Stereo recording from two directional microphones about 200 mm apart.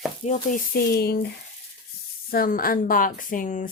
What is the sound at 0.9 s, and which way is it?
Speech, 55° left (ahead or behind).